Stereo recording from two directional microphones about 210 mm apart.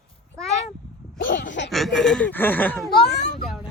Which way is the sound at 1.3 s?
40° left (ahead or behind).